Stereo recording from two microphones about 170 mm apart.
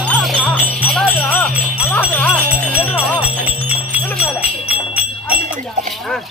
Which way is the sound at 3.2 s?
10° right (ahead or behind).